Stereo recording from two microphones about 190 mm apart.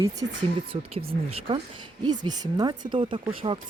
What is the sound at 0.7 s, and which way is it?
Speech, 30° right (ahead or behind).